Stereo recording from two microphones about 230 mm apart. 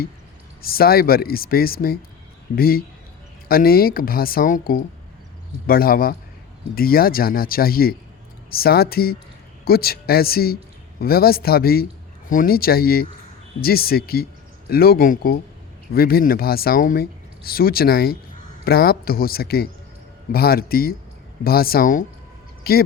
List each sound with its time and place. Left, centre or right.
0.6 s speech: left